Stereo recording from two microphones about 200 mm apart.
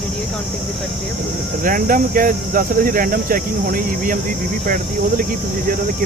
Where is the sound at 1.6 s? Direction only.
45° right (ahead or behind).